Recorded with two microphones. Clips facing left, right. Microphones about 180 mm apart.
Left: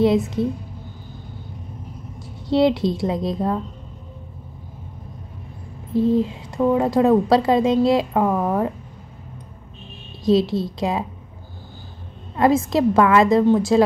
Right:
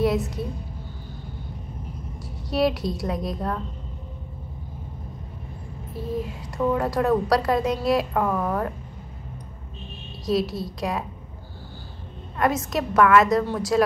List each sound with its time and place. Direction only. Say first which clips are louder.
0.0 s a woman's voice: left 6 dB; 25° left (ahead or behind)
2.5 s a woman's voice: left 6 dB; 25° left (ahead or behind)
5.9 s a woman's voice: left 11 dB; 25° left (ahead or behind)
10.2 s a woman's voice: left 6 dB; 25° left (ahead or behind)
12.4 s a woman's voice: left 7 dB; 25° left (ahead or behind)